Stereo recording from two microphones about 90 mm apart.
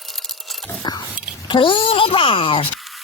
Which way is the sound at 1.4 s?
60° left (ahead or behind).